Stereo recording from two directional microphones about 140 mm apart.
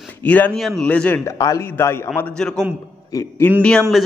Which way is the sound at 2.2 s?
5° left (ahead or behind).